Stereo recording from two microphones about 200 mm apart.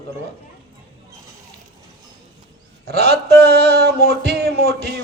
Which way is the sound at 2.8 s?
55° right (ahead or behind).